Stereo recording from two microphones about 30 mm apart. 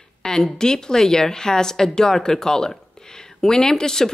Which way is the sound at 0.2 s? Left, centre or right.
Left.